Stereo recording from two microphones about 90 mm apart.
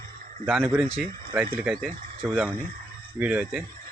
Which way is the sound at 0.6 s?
25° right (ahead or behind).